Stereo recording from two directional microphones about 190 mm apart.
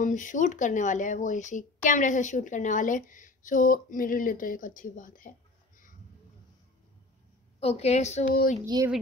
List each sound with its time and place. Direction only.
0.0 s speech: 40° left (ahead or behind)
7.6 s a woman's voice: 35° left (ahead or behind)
8.6 s speech: 20° right (ahead or behind)